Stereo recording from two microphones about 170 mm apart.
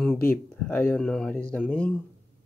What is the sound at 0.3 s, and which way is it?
Speech, 10° left (ahead or behind).